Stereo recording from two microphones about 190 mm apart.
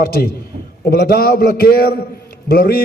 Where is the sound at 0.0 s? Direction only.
50° left (ahead or behind).